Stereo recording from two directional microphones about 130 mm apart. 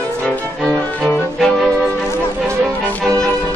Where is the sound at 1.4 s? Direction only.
5° left (ahead or behind).